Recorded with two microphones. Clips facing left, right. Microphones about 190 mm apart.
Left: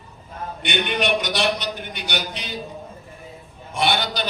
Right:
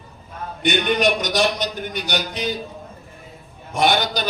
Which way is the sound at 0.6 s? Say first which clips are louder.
Right 5 dB; 40° right (ahead or behind).